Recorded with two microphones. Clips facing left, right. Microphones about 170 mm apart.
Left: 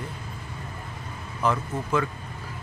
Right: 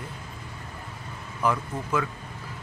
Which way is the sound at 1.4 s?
10° right (ahead or behind).